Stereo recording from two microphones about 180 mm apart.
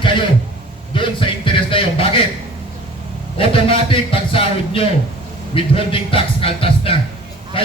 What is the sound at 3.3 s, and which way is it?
A man's voice, 30° left (ahead or behind).